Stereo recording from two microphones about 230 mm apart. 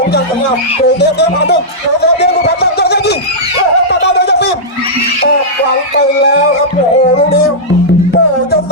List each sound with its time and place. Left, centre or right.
0.9 s speech: left
2.0 s a sound: left
6.1 s speech: left
7.2 s music: left